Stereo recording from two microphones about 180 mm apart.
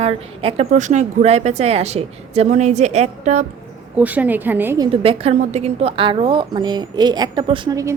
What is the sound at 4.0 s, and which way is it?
Speech, 10° right (ahead or behind).